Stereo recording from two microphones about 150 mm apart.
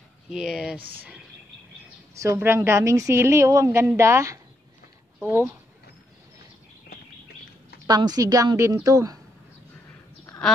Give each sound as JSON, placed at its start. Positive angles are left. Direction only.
{"t": 0.3, "sound": "speech", "side_deg": -5}
{"t": 2.1, "sound": "a woman's voice", "side_deg": -20}
{"t": 7.8, "sound": "a woman's voice", "side_deg": -25}